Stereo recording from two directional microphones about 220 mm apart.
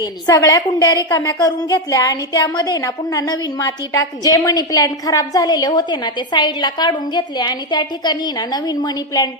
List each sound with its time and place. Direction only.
0.0 s a woman's voice: 20° left (ahead or behind)